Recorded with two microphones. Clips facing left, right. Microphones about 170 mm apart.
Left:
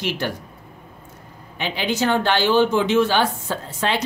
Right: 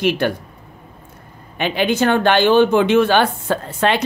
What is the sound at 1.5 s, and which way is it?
Speech, 55° right (ahead or behind).